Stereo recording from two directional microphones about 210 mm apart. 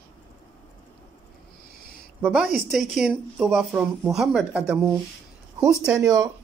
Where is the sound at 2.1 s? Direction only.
10° right (ahead or behind).